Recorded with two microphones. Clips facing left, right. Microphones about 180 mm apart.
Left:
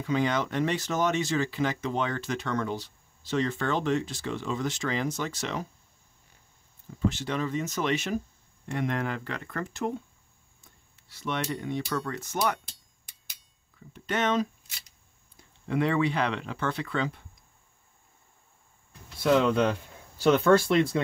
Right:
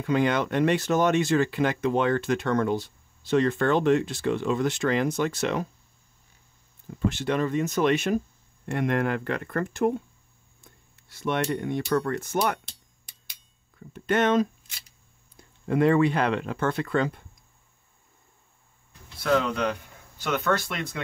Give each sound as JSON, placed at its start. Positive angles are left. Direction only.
{"t": 0.0, "sound": "speech", "side_deg": -55}
{"t": 7.1, "sound": "speech", "side_deg": -60}
{"t": 11.1, "sound": "speech", "side_deg": -50}
{"t": 13.7, "sound": "speech", "side_deg": -50}
{"t": 20.2, "sound": "speech", "side_deg": 30}